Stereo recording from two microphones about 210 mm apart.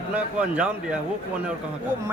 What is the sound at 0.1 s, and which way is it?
Speech, 5° right (ahead or behind).